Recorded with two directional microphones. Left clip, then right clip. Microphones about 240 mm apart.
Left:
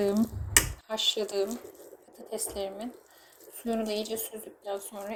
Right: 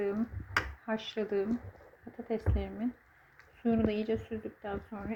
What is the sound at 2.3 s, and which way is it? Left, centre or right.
Speech, left.